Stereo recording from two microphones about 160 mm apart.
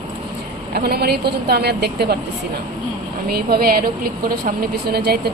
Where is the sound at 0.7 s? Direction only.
80° right.